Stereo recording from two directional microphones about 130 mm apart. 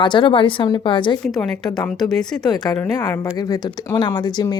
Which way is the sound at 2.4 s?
30° left (ahead or behind).